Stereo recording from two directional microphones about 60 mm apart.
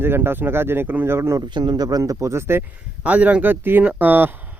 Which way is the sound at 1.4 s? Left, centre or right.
Right.